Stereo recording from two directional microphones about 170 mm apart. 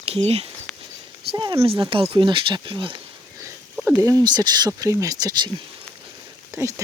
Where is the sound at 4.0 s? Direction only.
20° right (ahead or behind).